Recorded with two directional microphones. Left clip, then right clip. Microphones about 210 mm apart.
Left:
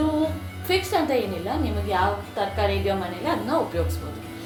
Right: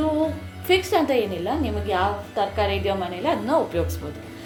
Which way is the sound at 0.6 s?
45° right (ahead or behind).